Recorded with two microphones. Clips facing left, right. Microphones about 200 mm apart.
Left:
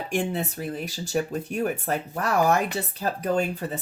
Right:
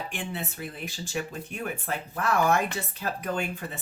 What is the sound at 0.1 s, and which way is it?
Speech, 40° left (ahead or behind).